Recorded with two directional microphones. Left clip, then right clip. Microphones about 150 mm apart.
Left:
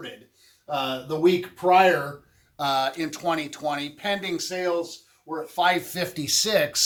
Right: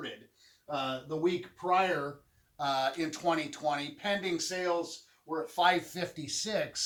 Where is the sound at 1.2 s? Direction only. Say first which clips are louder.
Left 12 dB; 30° right (ahead or behind).